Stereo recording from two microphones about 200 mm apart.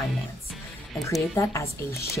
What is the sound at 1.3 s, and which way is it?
Speech, 15° left (ahead or behind).